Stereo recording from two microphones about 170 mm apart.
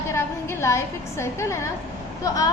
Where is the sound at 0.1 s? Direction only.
15° left (ahead or behind).